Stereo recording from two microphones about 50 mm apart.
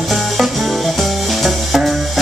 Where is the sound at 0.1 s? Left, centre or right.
Centre.